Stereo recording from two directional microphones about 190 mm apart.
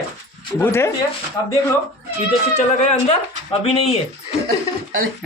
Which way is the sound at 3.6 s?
30° left (ahead or behind).